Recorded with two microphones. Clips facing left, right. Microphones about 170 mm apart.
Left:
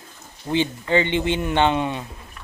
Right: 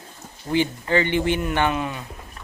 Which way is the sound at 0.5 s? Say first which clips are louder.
Left 1 dB; 20° left (ahead or behind).